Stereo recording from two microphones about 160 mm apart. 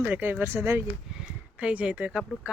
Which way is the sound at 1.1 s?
5° right (ahead or behind).